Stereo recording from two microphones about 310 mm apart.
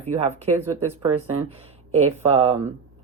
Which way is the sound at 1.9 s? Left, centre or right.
Right.